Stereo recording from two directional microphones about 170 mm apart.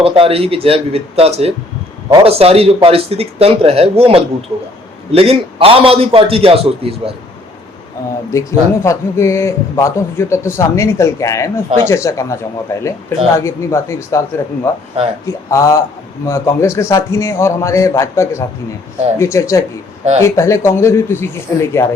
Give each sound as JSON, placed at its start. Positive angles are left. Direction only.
{"t": 0.0, "sound": "speech", "side_deg": -35}
{"t": 8.3, "sound": "a man's voice", "side_deg": 15}